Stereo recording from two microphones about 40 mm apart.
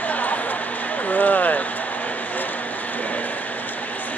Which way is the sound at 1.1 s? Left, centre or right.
Left.